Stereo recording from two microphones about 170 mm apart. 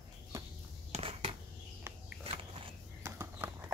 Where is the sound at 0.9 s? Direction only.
40° right (ahead or behind).